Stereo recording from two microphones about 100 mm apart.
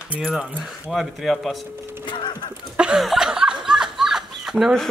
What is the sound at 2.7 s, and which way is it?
Speech, 5° right (ahead or behind).